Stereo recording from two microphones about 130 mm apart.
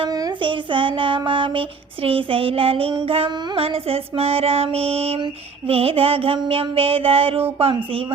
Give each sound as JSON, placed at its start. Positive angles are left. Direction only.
{"t": 0.1, "sound": "speech", "side_deg": -30}
{"t": 3.2, "sound": "music", "side_deg": -35}
{"t": 3.6, "sound": "mantra", "side_deg": -50}